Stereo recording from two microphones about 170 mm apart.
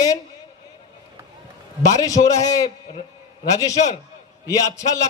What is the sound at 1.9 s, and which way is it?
Speech, 20° left (ahead or behind).